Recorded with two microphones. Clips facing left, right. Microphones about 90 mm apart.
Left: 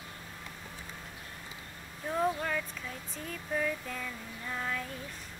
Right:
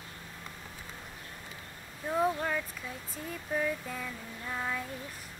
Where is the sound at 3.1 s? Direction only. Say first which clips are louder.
Right 1 dB; 10° right (ahead or behind).